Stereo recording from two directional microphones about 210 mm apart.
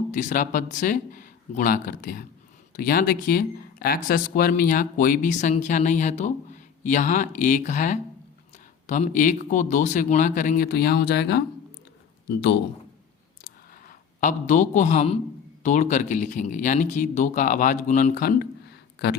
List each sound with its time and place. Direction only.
0.1 s speech: 35° left (ahead or behind); by 12.5 s 55° left (ahead or behind)
13.4 s a sound: 40° left (ahead or behind)
15.6 s speech: 35° left (ahead or behind); by 19.1 s 50° left (ahead or behind)